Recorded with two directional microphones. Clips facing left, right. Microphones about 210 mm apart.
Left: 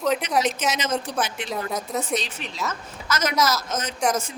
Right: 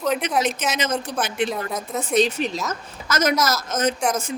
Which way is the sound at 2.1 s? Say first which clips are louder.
Right 9 dB; 45° right (ahead or behind).